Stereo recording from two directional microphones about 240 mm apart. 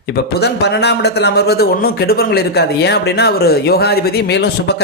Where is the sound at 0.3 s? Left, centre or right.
Left.